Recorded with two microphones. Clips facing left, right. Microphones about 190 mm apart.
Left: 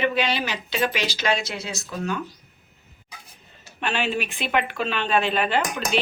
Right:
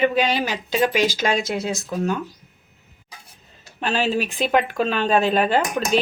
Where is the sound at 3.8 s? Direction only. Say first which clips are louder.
Right 4 dB; 35° right (ahead or behind).